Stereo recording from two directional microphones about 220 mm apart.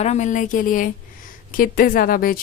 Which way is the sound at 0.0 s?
30° left (ahead or behind).